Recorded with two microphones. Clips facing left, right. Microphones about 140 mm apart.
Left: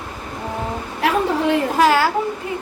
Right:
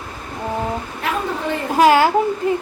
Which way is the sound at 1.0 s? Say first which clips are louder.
Left 5 dB; 75° left (ahead or behind).